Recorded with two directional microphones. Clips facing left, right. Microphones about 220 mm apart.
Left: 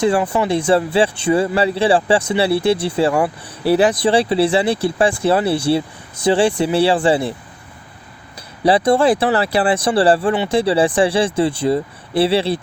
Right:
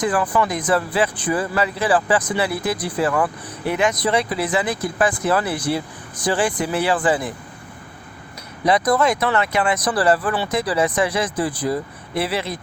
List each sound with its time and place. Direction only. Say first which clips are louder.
0.0 s speech: left 4 dB; 25° left (ahead or behind)
8.6 s speech: left 4 dB; 30° left (ahead or behind)